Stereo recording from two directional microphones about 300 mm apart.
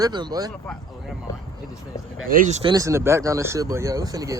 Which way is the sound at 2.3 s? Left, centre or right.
Right.